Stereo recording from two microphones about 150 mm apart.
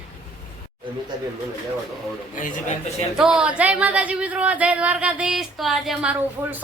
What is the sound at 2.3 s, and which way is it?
Speech, 55° left (ahead or behind).